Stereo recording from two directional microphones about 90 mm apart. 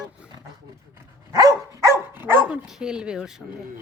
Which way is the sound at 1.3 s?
35° right (ahead or behind).